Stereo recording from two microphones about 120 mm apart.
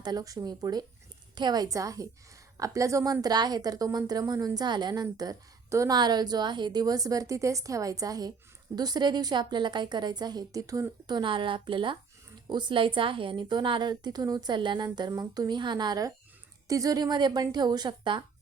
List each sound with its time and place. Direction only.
0.0 s a woman's voice: 35° right (ahead or behind)